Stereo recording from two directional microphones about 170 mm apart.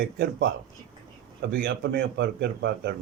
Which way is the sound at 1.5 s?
65° right (ahead or behind).